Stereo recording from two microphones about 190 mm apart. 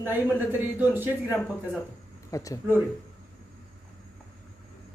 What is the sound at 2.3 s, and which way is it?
Speech, 15° left (ahead or behind).